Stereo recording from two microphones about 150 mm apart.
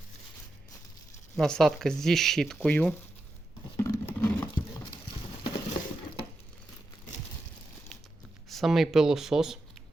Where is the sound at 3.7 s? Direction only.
20° left (ahead or behind).